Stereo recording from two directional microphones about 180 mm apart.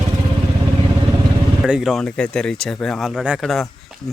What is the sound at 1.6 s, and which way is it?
Speech, 5° right (ahead or behind).